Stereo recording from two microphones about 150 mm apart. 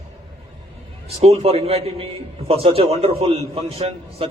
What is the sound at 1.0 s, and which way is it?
A man's voice, 45° right (ahead or behind).